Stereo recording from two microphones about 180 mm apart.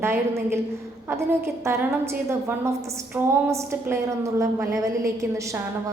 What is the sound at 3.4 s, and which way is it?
A woman's voice, 15° right (ahead or behind).